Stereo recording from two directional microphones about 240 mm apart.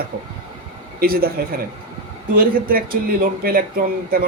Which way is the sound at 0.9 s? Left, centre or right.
Right.